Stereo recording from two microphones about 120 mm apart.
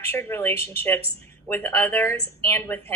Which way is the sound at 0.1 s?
20° left (ahead or behind).